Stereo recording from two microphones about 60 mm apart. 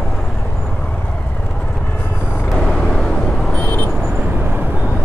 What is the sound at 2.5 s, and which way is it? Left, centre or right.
Vehicle, centre.